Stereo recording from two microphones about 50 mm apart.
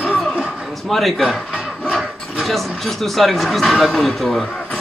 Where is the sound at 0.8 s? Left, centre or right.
Centre.